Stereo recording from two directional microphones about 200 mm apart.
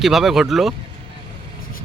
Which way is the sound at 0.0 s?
Centre (ahead or behind).